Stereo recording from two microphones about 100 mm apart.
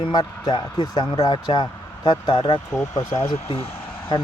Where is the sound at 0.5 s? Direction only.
60° left (ahead or behind).